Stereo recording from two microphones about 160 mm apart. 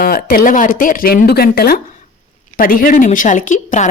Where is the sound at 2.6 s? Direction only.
60° left (ahead or behind).